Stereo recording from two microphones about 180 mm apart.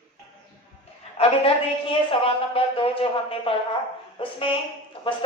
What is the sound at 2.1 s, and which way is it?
Speech, 30° left (ahead or behind).